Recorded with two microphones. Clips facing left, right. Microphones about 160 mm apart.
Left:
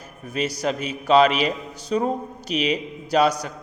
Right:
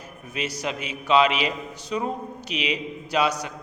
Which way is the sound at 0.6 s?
40° left (ahead or behind).